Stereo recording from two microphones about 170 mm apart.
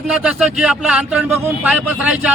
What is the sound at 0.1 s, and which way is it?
A man's voice, 5° right (ahead or behind).